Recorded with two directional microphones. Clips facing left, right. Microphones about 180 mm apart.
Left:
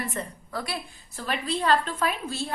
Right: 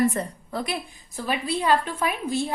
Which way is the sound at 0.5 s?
20° right (ahead or behind).